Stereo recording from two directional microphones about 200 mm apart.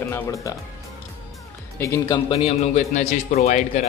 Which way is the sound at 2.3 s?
30° left (ahead or behind).